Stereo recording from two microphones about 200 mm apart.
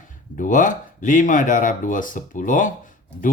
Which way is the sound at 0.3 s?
40° left (ahead or behind).